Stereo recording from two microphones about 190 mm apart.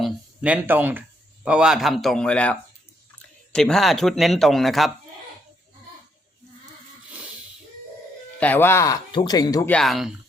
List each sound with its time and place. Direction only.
0.0 s speech: 5° right (ahead or behind)
8.4 s speech: 10° left (ahead or behind)
9.6 s speech: 5° left (ahead or behind)